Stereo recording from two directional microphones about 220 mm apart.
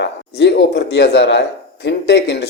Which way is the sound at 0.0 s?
50° left (ahead or behind).